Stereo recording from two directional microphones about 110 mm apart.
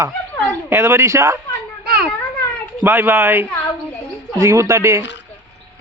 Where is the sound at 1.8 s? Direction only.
10° right (ahead or behind).